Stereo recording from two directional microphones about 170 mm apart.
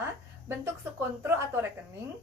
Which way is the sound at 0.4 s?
15° right (ahead or behind).